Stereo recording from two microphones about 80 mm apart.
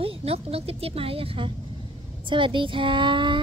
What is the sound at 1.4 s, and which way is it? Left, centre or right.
A woman's voice, right.